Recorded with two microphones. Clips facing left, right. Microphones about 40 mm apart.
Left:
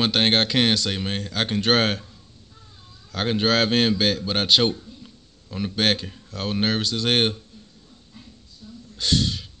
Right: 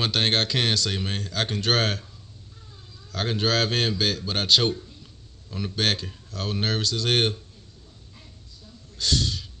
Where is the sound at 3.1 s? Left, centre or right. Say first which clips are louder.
Left 3 dB; left.